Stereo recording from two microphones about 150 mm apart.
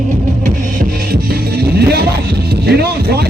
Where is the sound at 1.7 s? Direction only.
90° right.